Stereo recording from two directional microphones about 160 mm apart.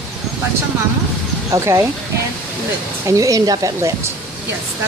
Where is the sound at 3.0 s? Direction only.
20° right (ahead or behind).